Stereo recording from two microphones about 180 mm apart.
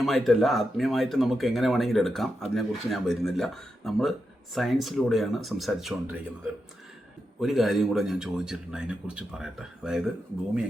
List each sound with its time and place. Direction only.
0.0 s speech: centre (ahead or behind)
7.3 s speech: centre (ahead or behind)